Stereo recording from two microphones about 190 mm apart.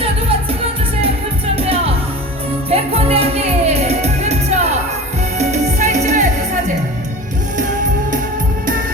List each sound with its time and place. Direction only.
2.6 s music: 30° right (ahead or behind)